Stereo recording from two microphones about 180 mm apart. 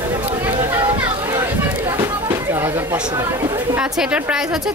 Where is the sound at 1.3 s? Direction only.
20° right (ahead or behind).